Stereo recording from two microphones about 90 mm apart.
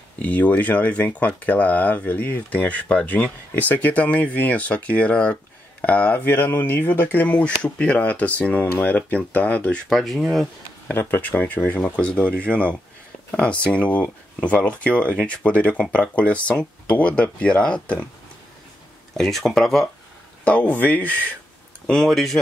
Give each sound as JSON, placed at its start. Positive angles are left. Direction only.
{"t": 0.2, "sound": "speech", "side_deg": 20}
{"t": 9.8, "sound": "speech", "side_deg": 0}
{"t": 10.9, "sound": "speech", "side_deg": 20}
{"t": 19.1, "sound": "speech", "side_deg": 5}
{"t": 20.4, "sound": "speech", "side_deg": 15}
{"t": 21.8, "sound": "speech", "side_deg": 5}